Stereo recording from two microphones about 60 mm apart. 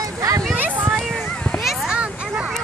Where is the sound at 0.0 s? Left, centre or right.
Right.